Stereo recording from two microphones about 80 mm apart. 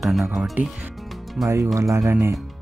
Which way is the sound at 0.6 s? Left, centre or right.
Right.